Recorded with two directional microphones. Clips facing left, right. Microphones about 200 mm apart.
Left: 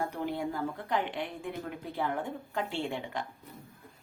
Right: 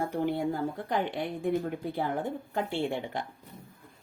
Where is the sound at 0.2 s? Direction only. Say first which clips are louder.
Right 4 dB; 55° right (ahead or behind).